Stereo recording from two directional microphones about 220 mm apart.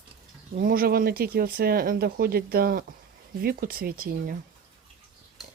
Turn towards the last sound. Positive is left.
turn(degrees=-40)  # may be behind; listen again after turning